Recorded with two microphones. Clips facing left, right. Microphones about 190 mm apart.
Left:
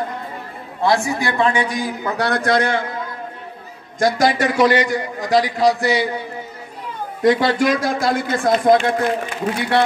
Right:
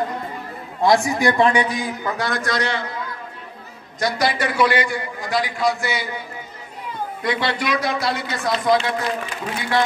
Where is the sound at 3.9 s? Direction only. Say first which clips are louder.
Left 5 dB; 45° left (ahead or behind).